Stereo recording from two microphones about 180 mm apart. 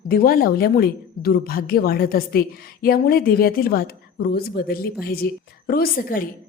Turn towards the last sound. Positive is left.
turn(degrees=50)  # may be behind; listen again after turning